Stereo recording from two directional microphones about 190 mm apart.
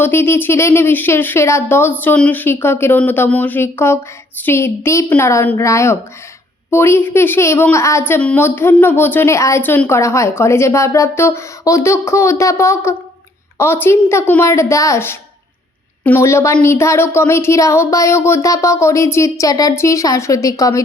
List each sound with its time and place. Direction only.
0.0 s a woman's voice: 10° left (ahead or behind)